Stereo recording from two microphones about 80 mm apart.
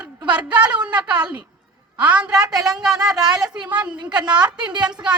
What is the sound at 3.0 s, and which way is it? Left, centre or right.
Speech, right.